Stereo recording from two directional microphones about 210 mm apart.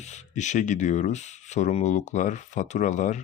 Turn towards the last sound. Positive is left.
turn(degrees=35)  # may be behind; listen again after turning